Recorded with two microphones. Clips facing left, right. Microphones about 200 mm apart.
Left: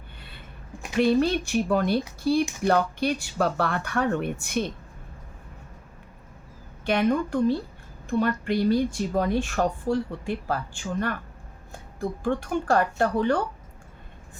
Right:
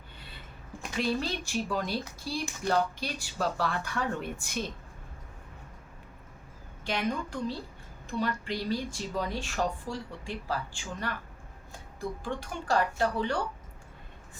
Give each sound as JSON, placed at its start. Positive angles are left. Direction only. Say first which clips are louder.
{"t": 0.9, "sound": "speech", "louder": "left 10 dB", "side_deg": 60}
{"t": 6.8, "sound": "speech", "louder": "left 9 dB", "side_deg": 60}
{"t": 12.2, "sound": "speech", "louder": "left 10 dB", "side_deg": 55}